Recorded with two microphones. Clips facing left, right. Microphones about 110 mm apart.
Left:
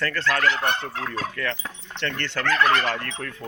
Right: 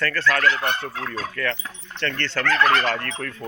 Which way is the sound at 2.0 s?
15° left (ahead or behind).